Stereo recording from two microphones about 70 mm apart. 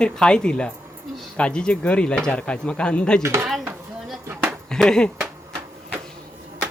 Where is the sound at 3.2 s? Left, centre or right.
Right.